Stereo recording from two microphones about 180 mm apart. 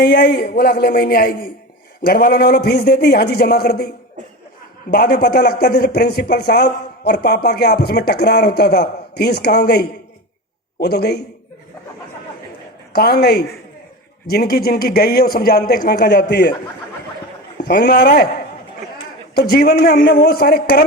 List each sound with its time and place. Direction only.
0.0 s a man's voice: 70° left (ahead or behind)
12.9 s speech: 60° left (ahead or behind)
17.7 s speech: 65° left (ahead or behind)
19.4 s speech: 60° left (ahead or behind)